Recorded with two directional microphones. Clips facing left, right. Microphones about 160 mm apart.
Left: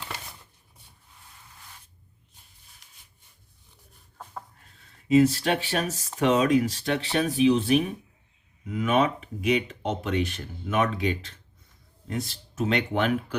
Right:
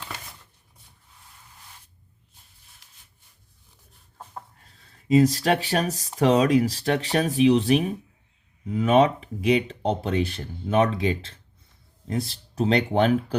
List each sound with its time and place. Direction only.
4.8 s speech: 35° right (ahead or behind)